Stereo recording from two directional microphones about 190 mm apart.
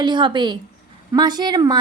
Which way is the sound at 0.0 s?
25° right (ahead or behind).